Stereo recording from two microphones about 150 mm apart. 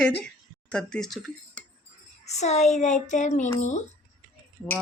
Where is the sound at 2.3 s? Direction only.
50° left (ahead or behind).